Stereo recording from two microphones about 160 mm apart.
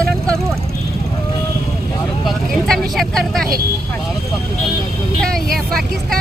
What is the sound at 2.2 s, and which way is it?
Vehicle, centre (ahead or behind).